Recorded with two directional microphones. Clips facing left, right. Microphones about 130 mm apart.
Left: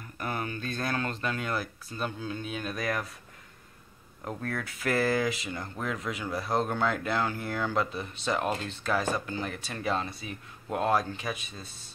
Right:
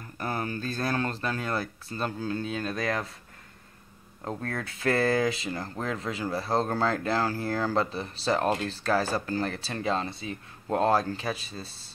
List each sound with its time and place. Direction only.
0.2 s speech: 35° right (ahead or behind)
2.6 s speech: 25° right (ahead or behind)
4.2 s speech: 25° right (ahead or behind)